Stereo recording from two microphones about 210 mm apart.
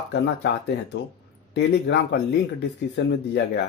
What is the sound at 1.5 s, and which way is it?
Speech, 55° left (ahead or behind).